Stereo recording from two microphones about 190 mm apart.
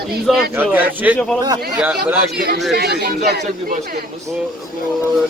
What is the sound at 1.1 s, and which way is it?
Speech, 5° left (ahead or behind).